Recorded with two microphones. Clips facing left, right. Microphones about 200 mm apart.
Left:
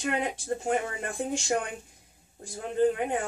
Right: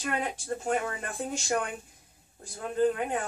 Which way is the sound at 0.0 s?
20° left (ahead or behind).